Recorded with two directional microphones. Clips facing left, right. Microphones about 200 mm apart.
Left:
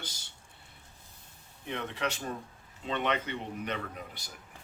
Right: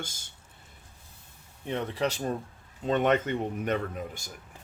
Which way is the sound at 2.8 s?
45° right (ahead or behind).